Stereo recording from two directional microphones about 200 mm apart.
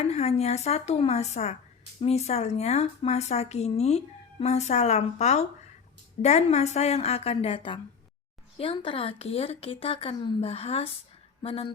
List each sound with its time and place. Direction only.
0.0 s speech: 30° left (ahead or behind)